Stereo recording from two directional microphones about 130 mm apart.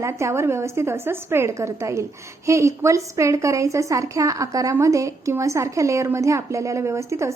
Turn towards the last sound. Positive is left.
turn(degrees=-20)  # may be behind; listen again after turning